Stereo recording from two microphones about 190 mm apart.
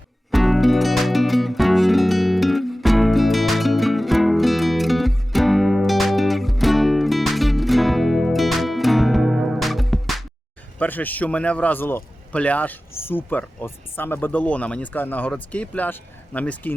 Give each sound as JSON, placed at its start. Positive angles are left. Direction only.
{"t": 0.3, "sound": "music", "side_deg": 0}
{"t": 10.8, "sound": "a man's voice", "side_deg": 10}